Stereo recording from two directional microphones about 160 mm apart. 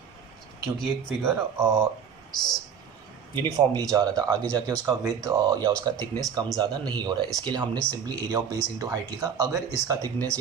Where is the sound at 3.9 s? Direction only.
25° right (ahead or behind).